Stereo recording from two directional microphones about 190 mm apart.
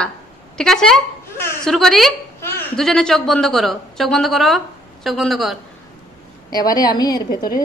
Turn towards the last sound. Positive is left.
turn(degrees=20)  # may be behind; listen again after turning